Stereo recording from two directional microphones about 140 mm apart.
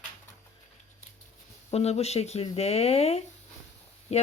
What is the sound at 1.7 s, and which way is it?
Speech, 50° left (ahead or behind).